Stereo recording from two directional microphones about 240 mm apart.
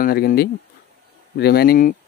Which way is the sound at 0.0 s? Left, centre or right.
Left.